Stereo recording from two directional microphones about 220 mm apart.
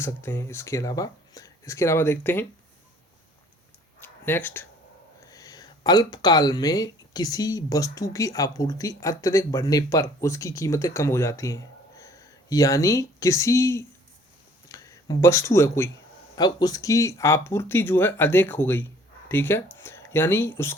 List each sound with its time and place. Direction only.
0.0 s speech: 10° left (ahead or behind)
4.0 s speech: 10° left (ahead or behind)